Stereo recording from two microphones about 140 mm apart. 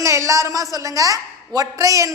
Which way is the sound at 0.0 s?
20° right (ahead or behind).